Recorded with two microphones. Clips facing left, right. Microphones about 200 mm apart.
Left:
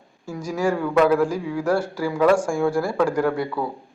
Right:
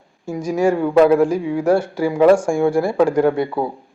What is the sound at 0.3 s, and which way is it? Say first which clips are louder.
A man's voice: right 6 dB; 20° right (ahead or behind).